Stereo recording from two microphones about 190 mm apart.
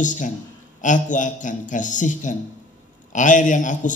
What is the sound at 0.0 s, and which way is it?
A man's voice, 40° left (ahead or behind).